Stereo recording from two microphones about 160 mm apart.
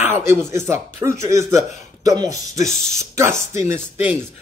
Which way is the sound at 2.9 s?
20° right (ahead or behind).